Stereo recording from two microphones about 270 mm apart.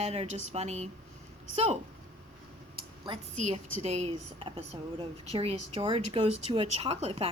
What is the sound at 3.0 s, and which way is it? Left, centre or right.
A woman's voice, right.